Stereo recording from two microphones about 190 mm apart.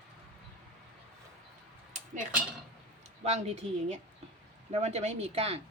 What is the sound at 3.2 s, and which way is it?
Speech, 35° right (ahead or behind).